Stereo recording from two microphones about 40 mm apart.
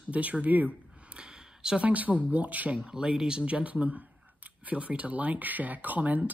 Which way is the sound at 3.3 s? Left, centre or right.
Right.